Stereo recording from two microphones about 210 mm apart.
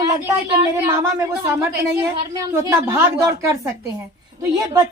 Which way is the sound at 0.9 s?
15° right (ahead or behind).